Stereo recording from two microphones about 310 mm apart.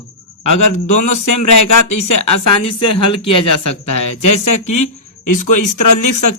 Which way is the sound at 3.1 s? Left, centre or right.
Centre.